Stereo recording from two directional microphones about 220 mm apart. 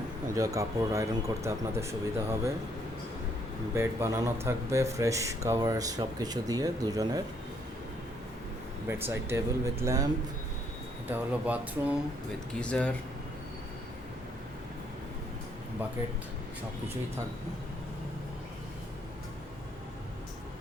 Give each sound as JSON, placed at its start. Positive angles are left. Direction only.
{"t": 0.3, "sound": "speech", "side_deg": -15}
{"t": 3.8, "sound": "speech", "side_deg": -15}
{"t": 8.9, "sound": "speech", "side_deg": -10}
{"t": 11.1, "sound": "speech", "side_deg": -5}
{"t": 12.5, "sound": "speech", "side_deg": 5}